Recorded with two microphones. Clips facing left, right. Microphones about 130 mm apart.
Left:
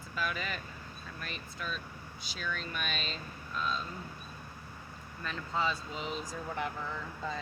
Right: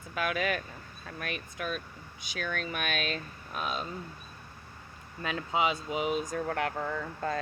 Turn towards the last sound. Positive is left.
turn(degrees=-55)  # may be behind; listen again after turning